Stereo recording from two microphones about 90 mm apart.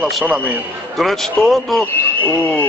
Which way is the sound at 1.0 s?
5° left (ahead or behind).